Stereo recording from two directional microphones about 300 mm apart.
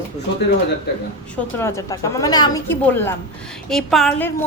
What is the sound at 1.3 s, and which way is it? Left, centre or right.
A woman's voice, centre.